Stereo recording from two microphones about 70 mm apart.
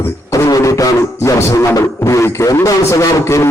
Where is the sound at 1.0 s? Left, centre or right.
Left.